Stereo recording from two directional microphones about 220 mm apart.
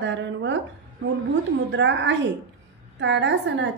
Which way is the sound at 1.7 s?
55° right (ahead or behind).